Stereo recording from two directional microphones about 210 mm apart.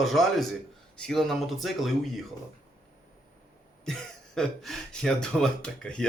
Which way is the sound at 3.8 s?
Centre (ahead or behind).